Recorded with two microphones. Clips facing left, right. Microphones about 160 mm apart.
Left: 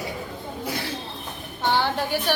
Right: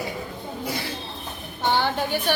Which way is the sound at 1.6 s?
Centre (ahead or behind).